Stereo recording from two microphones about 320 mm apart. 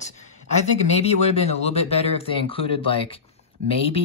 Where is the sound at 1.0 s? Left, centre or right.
Centre.